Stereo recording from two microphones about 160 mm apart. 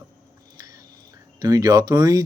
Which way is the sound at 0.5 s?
20° right (ahead or behind).